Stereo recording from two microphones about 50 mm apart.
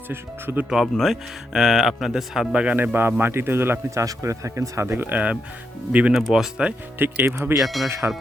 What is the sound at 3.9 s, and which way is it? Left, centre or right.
Speech, right.